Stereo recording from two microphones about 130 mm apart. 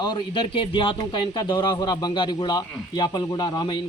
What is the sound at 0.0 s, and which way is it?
A man's voice, 35° left (ahead or behind).